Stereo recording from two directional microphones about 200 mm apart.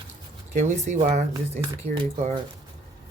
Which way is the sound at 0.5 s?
35° right (ahead or behind).